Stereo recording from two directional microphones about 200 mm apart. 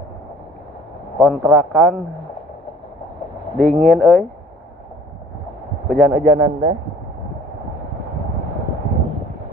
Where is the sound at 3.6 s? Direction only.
Centre (ahead or behind).